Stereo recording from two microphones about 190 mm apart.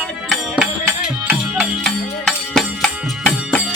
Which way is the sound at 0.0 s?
Centre (ahead or behind).